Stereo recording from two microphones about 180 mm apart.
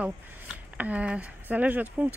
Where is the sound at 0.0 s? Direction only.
10° right (ahead or behind).